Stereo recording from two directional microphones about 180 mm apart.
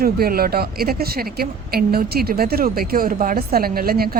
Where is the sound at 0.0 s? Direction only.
55° right (ahead or behind).